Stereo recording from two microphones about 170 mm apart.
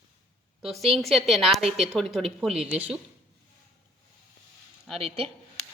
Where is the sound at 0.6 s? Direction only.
Centre (ahead or behind).